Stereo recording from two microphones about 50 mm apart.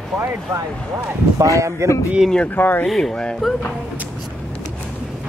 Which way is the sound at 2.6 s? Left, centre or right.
Left.